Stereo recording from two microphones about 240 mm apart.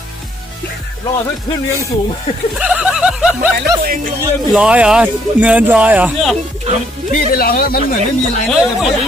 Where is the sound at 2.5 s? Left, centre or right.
Centre.